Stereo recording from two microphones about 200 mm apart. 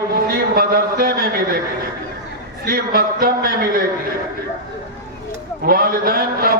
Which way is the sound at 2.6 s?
50° right (ahead or behind).